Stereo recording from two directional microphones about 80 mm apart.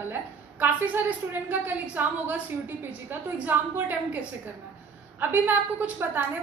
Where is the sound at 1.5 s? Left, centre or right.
Right.